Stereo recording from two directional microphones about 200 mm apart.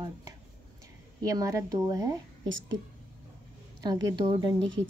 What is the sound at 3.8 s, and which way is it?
Speech, 20° right (ahead or behind).